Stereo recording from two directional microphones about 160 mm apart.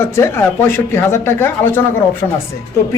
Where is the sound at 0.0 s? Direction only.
15° left (ahead or behind).